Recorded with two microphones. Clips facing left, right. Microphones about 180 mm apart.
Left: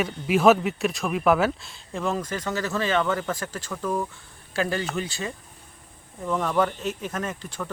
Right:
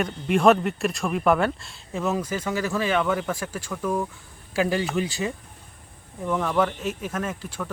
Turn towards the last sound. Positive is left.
turn(degrees=-5)  # may be behind; listen again after turning